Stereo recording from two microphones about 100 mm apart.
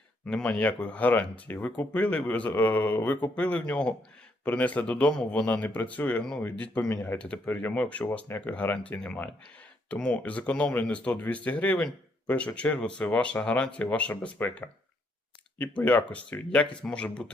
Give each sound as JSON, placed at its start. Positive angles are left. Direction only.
{"t": 0.3, "sound": "speech", "side_deg": 10}
{"t": 7.2, "sound": "speech", "side_deg": 10}